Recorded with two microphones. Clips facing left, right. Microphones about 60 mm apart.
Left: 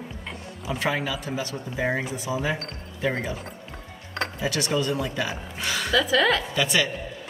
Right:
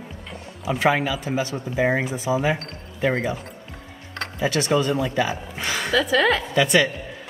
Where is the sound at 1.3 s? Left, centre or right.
Right.